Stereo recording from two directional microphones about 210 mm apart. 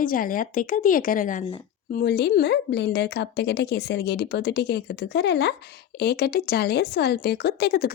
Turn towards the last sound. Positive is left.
turn(degrees=50)  # may be behind; listen again after turning